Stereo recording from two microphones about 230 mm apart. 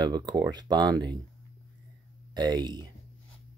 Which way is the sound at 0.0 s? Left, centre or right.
Centre.